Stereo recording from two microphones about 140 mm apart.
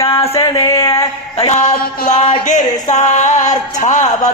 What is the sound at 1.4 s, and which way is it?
Music, 55° left (ahead or behind).